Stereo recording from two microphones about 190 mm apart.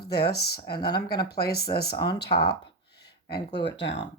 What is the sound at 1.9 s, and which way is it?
Speech, 20° left (ahead or behind).